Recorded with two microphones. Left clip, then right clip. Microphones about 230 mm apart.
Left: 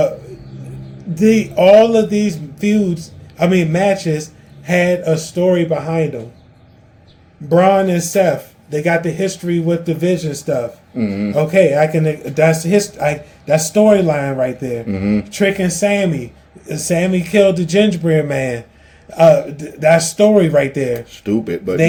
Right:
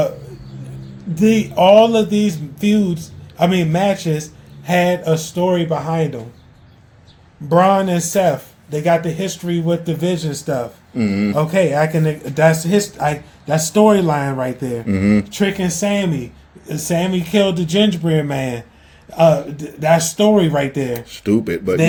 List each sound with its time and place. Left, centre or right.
1.1 s a man's voice: centre
7.4 s a man's voice: centre
10.9 s speech: right
11.3 s a man's voice: centre
14.8 s speech: right
15.3 s a man's voice: centre
20.9 s speech: right